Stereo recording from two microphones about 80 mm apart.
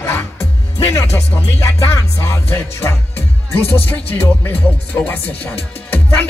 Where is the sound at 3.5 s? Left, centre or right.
Left.